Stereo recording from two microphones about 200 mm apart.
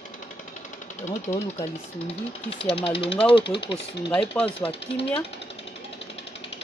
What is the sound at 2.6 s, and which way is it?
Speech, 30° left (ahead or behind).